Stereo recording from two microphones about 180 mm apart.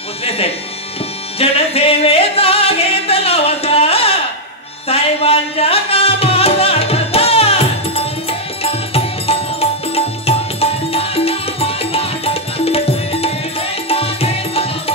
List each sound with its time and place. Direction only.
0.2 s speech: 35° left (ahead or behind)
1.4 s music: 35° left (ahead or behind)